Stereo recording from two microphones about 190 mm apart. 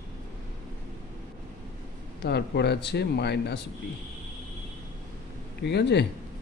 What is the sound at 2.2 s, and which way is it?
Speech, 60° left (ahead or behind).